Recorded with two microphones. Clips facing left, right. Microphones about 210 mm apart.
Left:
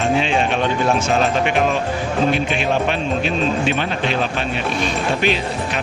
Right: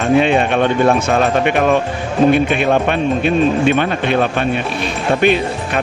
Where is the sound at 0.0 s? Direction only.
60° right (ahead or behind).